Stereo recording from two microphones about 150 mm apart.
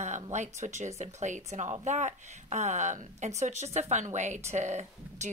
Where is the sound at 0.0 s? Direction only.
50° right (ahead or behind).